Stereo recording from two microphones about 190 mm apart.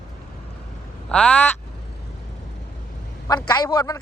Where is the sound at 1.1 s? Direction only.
5° left (ahead or behind).